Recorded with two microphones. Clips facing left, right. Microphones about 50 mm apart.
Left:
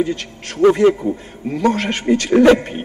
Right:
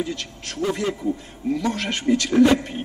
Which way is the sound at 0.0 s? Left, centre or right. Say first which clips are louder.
Left 7 dB; left.